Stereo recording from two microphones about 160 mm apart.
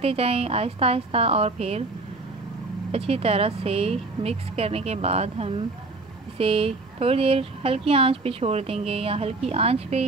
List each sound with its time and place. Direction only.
0.0 s speech: 40° right (ahead or behind)
2.9 s speech: 40° right (ahead or behind)